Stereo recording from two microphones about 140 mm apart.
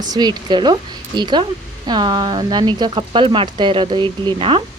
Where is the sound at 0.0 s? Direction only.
30° right (ahead or behind).